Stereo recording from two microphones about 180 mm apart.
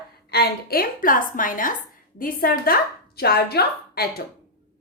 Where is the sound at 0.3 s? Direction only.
65° left (ahead or behind).